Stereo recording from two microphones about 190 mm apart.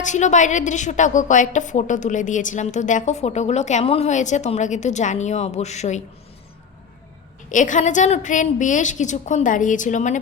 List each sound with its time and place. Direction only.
0.0 s a woman's voice: 40° left (ahead or behind)
7.5 s a woman's voice: 40° left (ahead or behind)